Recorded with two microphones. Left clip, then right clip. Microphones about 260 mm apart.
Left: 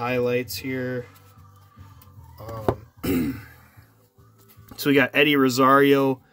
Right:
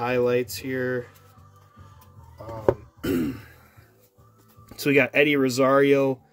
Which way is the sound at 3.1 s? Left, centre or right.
Centre.